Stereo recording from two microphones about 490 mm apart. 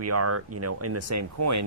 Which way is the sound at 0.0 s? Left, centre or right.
Right.